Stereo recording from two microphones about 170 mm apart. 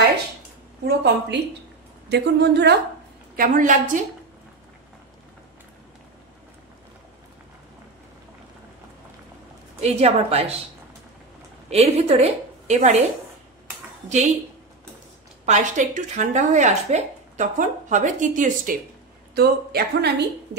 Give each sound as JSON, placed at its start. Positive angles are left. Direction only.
{"t": 0.8, "sound": "speech", "side_deg": -85}
{"t": 3.3, "sound": "speech", "side_deg": -50}
{"t": 9.8, "sound": "a woman's voice", "side_deg": -40}
{"t": 11.7, "sound": "a woman's voice", "side_deg": -35}
{"t": 14.0, "sound": "speech", "side_deg": -45}
{"t": 15.4, "sound": "speech", "side_deg": -45}
{"t": 19.3, "sound": "speech", "side_deg": -70}